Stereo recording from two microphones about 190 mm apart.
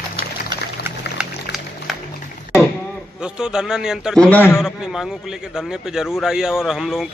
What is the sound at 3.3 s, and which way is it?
A man's voice, 5° right (ahead or behind).